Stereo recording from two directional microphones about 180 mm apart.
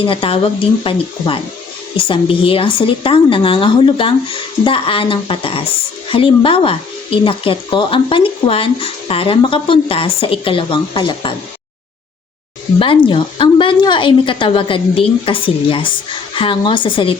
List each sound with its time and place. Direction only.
0.0 s speech: 30° left (ahead or behind)
12.8 s speech: 30° left (ahead or behind)